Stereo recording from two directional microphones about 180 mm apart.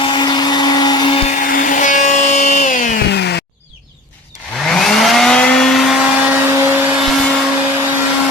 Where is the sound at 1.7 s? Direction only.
45° left (ahead or behind).